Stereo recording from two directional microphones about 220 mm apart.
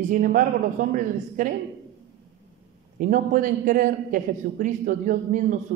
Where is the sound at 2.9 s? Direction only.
40° right (ahead or behind).